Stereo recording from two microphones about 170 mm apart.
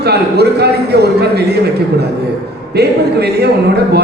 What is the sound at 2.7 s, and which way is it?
Speech, 70° right (ahead or behind).